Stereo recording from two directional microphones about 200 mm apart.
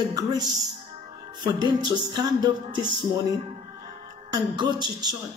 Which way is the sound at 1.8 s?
20° right (ahead or behind).